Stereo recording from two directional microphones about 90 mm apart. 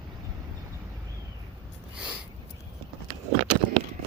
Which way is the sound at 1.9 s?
10° right (ahead or behind).